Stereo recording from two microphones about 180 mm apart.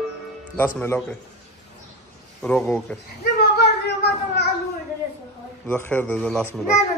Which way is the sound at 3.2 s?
65° left (ahead or behind).